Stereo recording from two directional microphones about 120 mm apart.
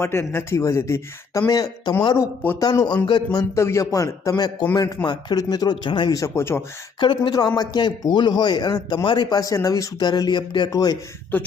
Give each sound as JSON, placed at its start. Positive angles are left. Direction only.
{"t": 0.0, "sound": "speech", "side_deg": 20}
{"t": 2.1, "sound": "speech", "side_deg": 15}
{"t": 2.6, "sound": "a man's voice", "side_deg": 30}
{"t": 6.1, "sound": "speech", "side_deg": 25}
{"t": 7.0, "sound": "a man's voice", "side_deg": 35}
{"t": 11.3, "sound": "speech", "side_deg": 15}